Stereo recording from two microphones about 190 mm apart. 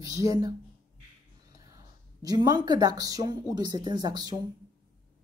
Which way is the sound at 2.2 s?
20° right (ahead or behind).